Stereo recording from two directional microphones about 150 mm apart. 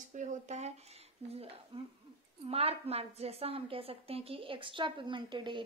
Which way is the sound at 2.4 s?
40° right (ahead or behind).